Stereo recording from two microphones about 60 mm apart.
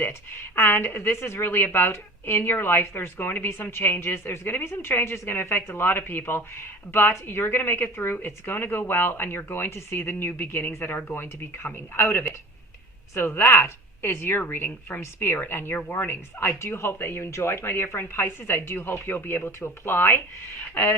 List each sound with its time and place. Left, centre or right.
0.1 s a woman's voice: left